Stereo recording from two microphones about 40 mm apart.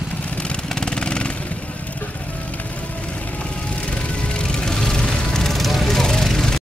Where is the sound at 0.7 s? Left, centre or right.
Left.